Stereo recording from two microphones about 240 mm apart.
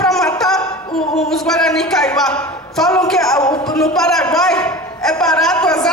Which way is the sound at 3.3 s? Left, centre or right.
Centre.